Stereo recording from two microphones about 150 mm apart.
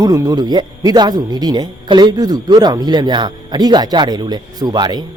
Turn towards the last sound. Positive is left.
turn(degrees=-30)  # may be behind; listen again after turning